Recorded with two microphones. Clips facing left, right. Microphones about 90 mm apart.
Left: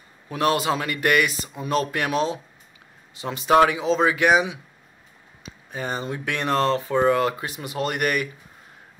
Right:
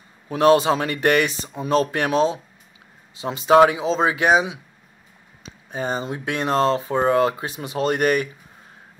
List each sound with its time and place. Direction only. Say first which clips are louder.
0.3 s speech: right 6 dB; 30° right (ahead or behind)
5.7 s speech: right 3 dB; 25° right (ahead or behind)